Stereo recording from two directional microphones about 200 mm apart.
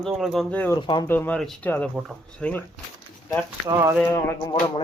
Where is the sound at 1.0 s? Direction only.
10° left (ahead or behind).